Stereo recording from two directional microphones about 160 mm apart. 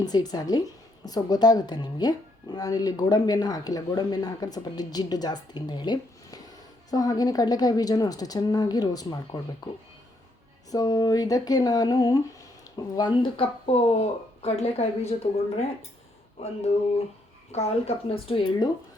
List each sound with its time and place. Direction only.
0.0 s speech: 25° left (ahead or behind)
10.7 s a woman's voice: 25° left (ahead or behind)